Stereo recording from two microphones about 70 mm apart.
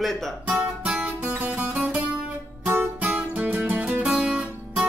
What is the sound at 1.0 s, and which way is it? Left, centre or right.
Music, right.